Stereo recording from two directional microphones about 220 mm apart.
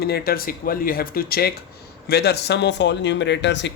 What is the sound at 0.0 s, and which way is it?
Speech, 45° left (ahead or behind).